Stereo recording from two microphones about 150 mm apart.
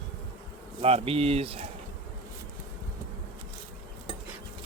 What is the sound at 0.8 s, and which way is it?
Speech, 40° right (ahead or behind).